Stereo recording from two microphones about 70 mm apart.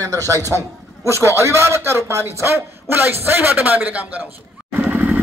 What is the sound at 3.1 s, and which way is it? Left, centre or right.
A man's voice, right.